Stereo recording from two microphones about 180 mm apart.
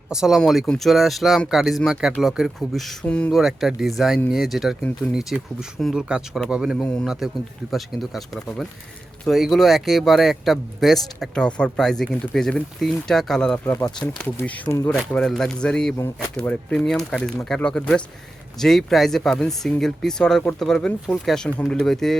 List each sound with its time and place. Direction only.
0.1 s speech: centre (ahead or behind)